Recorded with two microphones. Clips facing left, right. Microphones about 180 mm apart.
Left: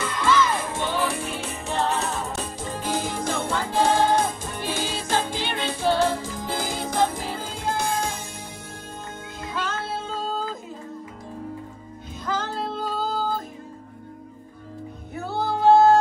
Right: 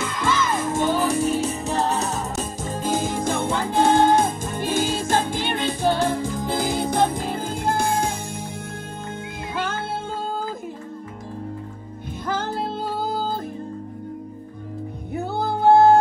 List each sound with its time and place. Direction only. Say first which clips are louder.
0.7 s music: right 5 dB; 45° right (ahead or behind)
9.6 s music: right 2 dB; 55° right (ahead or behind)
12.3 s music: right 2 dB; 55° right (ahead or behind)
15.1 s music: right 2 dB; 60° right (ahead or behind)